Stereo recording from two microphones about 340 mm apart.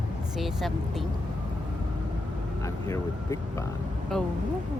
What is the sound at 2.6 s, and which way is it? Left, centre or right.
Speech, centre.